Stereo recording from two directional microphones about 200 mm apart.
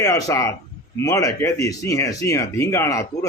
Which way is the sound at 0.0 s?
15° left (ahead or behind).